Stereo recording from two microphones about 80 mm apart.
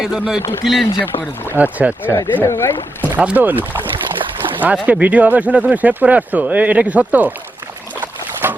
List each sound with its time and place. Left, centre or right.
0.0 s speech: centre
1.5 s speech: centre
2.4 s speech: left
3.2 s speech: centre
4.2 s splash: right
4.6 s speech: centre
8.0 s boat: right